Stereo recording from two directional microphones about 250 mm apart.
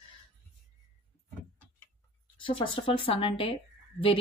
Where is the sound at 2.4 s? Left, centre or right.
Left.